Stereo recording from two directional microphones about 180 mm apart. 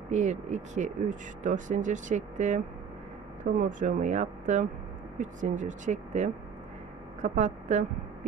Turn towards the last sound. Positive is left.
turn(degrees=-40)  # may be behind; listen again after turning